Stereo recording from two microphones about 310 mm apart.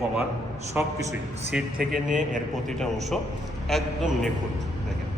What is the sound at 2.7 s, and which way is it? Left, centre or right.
A man's voice, centre.